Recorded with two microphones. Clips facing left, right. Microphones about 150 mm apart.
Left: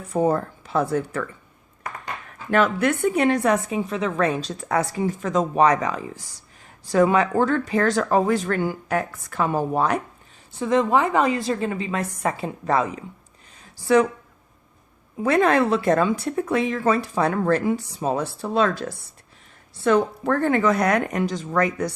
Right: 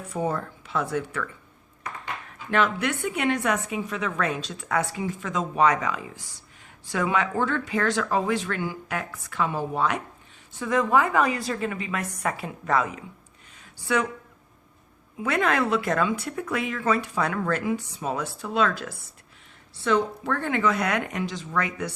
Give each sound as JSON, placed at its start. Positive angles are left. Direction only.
{"t": 0.1, "sound": "speech", "side_deg": 40}
{"t": 2.5, "sound": "speech", "side_deg": 45}
{"t": 10.6, "sound": "a woman's voice", "side_deg": 25}
{"t": 15.2, "sound": "a woman's voice", "side_deg": 35}